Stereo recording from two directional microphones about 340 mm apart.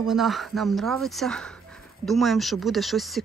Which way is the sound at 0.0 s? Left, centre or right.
Centre.